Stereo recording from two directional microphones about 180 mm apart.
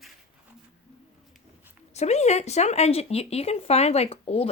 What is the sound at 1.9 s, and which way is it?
Speech, 40° left (ahead or behind).